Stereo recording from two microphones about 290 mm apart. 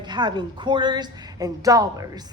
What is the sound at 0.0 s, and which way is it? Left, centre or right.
A woman's voice, centre.